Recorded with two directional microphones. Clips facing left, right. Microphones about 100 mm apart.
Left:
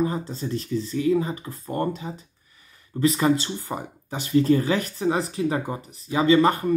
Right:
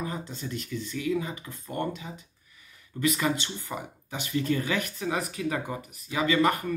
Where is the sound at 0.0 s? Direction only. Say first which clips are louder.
Left 9 dB; 35° left (ahead or behind).